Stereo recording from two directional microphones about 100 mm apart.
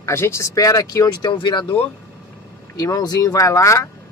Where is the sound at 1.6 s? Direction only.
15° left (ahead or behind).